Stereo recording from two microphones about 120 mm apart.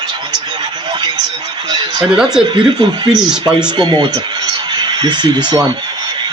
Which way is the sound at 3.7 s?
40° right (ahead or behind).